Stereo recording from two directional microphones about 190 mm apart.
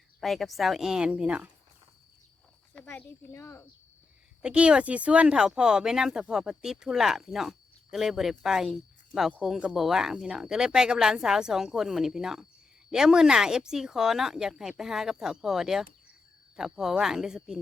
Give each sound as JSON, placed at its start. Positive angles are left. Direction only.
{"t": 0.2, "sound": "speech", "side_deg": 0}
{"t": 2.7, "sound": "speech", "side_deg": 10}
{"t": 4.4, "sound": "speech", "side_deg": -5}